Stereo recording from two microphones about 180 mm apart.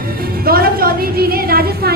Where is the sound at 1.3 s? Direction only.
55° right (ahead or behind).